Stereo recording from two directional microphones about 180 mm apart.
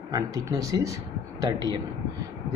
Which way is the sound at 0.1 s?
20° right (ahead or behind).